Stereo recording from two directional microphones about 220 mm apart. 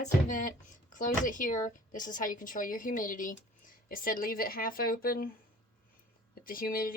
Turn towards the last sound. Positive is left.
turn(degrees=40)  # may be behind; listen again after turning